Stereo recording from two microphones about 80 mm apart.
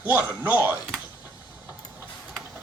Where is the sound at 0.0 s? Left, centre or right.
Right.